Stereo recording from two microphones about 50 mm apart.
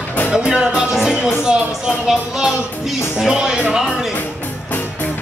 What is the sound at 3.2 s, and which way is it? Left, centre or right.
Music, centre.